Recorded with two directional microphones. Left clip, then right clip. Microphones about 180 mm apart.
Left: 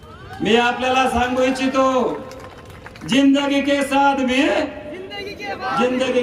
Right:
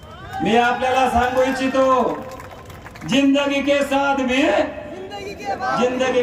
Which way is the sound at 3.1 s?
20° right (ahead or behind).